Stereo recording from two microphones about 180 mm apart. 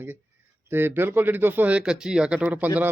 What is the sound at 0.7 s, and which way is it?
Speech, 10° right (ahead or behind).